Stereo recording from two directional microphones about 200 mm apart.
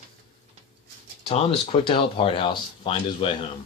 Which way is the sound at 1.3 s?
30° left (ahead or behind).